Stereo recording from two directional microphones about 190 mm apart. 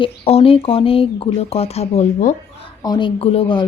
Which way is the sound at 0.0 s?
30° left (ahead or behind).